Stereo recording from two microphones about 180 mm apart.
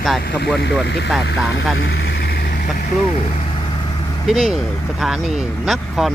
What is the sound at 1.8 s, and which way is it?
Vehicle, 65° left (ahead or behind).